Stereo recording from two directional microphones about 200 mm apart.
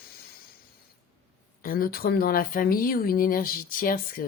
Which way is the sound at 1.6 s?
45° left (ahead or behind).